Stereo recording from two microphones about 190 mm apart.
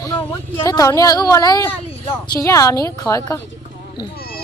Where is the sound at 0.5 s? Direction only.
20° left (ahead or behind).